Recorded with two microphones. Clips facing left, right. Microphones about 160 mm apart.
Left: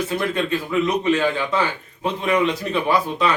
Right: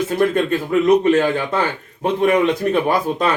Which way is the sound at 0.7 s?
50° right (ahead or behind).